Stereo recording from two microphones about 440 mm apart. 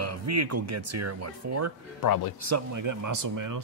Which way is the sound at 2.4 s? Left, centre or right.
Right.